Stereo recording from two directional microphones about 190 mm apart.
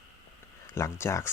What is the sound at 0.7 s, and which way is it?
Speech, 15° left (ahead or behind).